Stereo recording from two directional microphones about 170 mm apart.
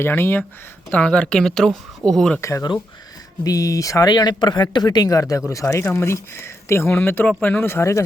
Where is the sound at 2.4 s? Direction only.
20° left (ahead or behind).